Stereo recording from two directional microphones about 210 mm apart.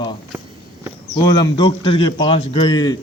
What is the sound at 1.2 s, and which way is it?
A man's voice, 20° left (ahead or behind).